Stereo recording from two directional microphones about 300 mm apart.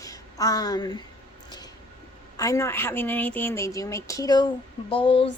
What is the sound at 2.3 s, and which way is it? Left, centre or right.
A woman's voice, centre.